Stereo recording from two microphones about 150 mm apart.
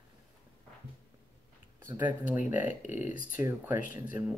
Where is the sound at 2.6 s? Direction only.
55° left (ahead or behind).